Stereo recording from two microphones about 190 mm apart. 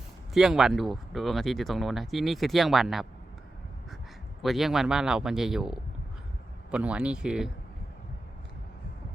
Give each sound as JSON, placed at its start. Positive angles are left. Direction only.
{"t": 0.3, "sound": "speech", "side_deg": 0}
{"t": 4.4, "sound": "speech", "side_deg": 0}